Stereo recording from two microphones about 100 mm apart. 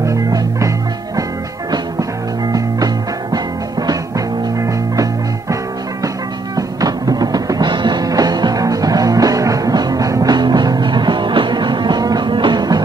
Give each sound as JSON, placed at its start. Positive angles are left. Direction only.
{"t": 0.0, "sound": "music", "side_deg": -30}
{"t": 6.5, "sound": "music", "side_deg": -40}